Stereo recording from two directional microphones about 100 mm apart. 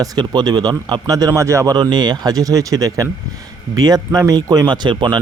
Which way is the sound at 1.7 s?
50° right (ahead or behind).